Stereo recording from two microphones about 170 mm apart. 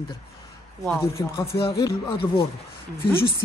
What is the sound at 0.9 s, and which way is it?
Speech, 15° left (ahead or behind).